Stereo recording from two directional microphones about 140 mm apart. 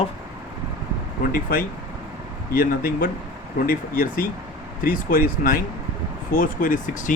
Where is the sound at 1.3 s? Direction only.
90° left.